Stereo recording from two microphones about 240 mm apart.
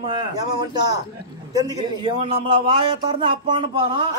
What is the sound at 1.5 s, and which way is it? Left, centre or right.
A man's voice, centre.